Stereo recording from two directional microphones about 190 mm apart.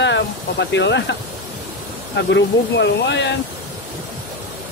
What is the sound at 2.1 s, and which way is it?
Speech, 65° left (ahead or behind).